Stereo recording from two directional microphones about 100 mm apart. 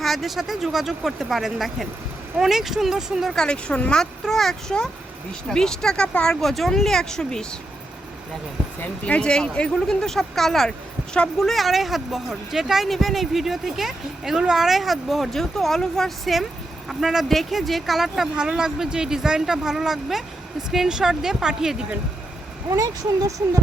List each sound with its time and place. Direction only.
0.0 s speech: centre (ahead or behind)
8.8 s speech: 10° left (ahead or behind); by 21.8 s 5° right (ahead or behind)
22.7 s speech: 35° right (ahead or behind)